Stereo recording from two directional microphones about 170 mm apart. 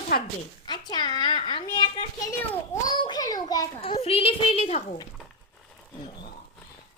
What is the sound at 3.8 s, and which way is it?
A woman's voice, 35° left (ahead or behind).